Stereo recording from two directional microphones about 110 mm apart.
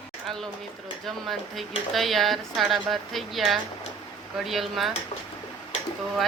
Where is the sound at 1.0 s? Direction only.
Centre (ahead or behind).